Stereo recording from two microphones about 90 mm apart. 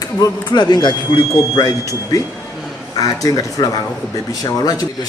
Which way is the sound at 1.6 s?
40° left (ahead or behind).